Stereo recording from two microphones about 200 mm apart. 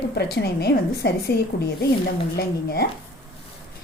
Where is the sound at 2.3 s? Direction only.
50° left (ahead or behind).